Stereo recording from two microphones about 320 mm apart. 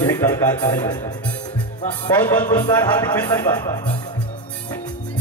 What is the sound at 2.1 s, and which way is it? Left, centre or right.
Speech, centre.